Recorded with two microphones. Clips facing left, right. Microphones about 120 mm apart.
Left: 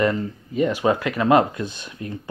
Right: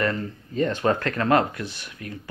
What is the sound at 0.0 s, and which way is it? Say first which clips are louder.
Speech: left 4 dB; 15° left (ahead or behind).